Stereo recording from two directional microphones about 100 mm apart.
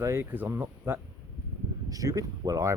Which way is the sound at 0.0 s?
30° right (ahead or behind).